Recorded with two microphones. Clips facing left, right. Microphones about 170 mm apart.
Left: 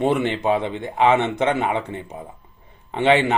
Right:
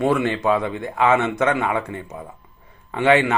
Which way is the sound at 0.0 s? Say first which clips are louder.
Right 1 dB; 20° left (ahead or behind).